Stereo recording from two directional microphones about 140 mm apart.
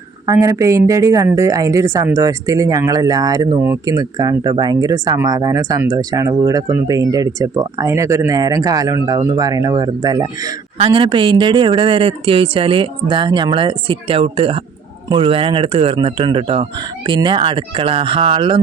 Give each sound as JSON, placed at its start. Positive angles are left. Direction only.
{"t": 0.3, "sound": "a woman's voice", "side_deg": -20}
{"t": 10.8, "sound": "speech", "side_deg": -40}